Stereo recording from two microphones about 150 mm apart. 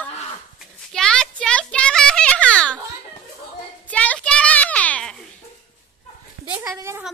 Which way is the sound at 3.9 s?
10° left (ahead or behind).